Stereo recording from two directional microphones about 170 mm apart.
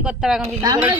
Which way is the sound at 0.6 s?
20° right (ahead or behind).